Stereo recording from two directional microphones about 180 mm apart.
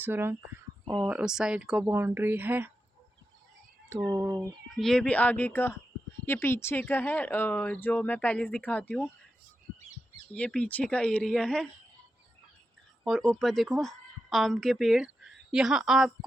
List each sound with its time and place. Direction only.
0.0 s speech: 10° right (ahead or behind)
3.8 s speech: 20° right (ahead or behind)
4.7 s speech: centre (ahead or behind)
10.3 s speech: 5° left (ahead or behind)
13.1 s a woman's voice: centre (ahead or behind)